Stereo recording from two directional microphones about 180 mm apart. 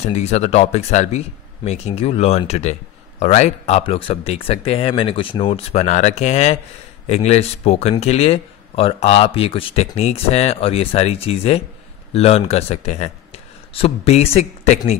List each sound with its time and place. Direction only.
0.0 s speech: 35° left (ahead or behind)